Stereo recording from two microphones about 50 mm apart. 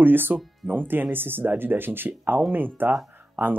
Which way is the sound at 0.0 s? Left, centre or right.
Right.